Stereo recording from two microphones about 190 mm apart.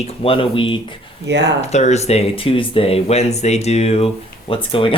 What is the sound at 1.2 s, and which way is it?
Speech, 65° right (ahead or behind).